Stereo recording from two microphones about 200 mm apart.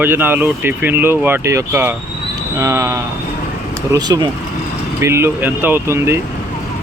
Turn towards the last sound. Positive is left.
turn(degrees=-15)  # may be behind; listen again after turning